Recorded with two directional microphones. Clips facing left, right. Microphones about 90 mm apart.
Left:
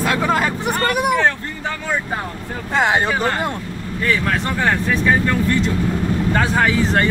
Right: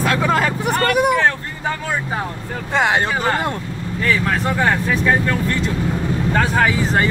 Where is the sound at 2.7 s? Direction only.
Centre (ahead or behind).